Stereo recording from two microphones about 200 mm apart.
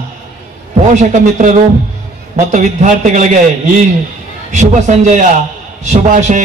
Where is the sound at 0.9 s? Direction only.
35° right (ahead or behind).